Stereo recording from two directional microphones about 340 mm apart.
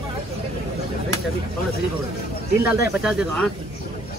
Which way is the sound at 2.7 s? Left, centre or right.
Centre.